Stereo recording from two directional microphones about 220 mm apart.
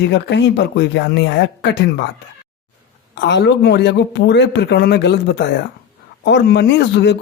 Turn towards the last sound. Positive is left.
turn(degrees=50)  # may be behind; listen again after turning